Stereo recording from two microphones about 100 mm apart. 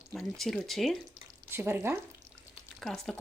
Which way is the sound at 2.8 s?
5° left (ahead or behind).